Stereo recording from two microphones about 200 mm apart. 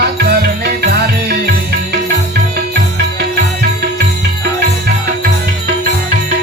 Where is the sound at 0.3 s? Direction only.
50° right (ahead or behind).